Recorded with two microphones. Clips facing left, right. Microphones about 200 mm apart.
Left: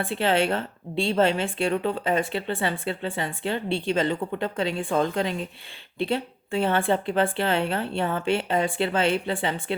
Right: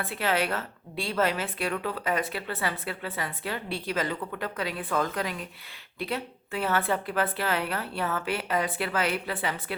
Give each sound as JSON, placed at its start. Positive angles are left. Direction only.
{"t": 0.0, "sound": "a woman's voice", "side_deg": 30}